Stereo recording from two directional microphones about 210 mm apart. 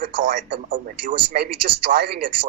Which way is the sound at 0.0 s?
40° right (ahead or behind).